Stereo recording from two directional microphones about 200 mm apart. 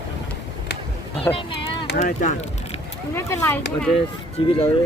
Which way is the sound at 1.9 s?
40° left (ahead or behind).